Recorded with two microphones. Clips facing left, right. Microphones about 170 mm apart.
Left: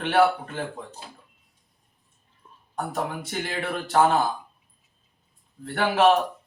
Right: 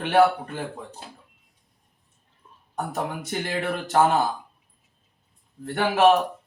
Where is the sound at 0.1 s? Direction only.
15° right (ahead or behind).